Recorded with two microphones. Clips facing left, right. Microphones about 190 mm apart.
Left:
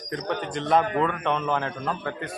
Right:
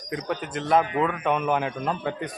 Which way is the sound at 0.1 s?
5° right (ahead or behind).